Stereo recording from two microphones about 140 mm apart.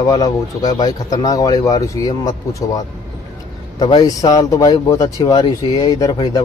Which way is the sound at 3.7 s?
30° left (ahead or behind).